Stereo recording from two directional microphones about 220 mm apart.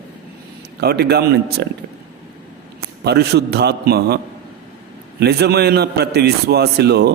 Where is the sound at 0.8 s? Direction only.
45° right (ahead or behind).